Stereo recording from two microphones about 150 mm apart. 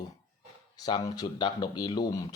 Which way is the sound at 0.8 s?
25° left (ahead or behind).